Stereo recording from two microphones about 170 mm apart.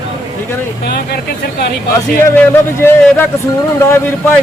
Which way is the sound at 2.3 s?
15° left (ahead or behind).